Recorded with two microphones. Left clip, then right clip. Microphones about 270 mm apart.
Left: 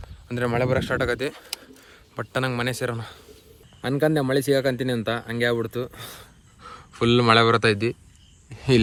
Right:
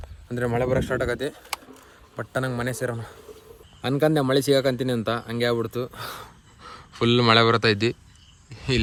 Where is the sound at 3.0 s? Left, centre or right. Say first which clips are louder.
Even; centre.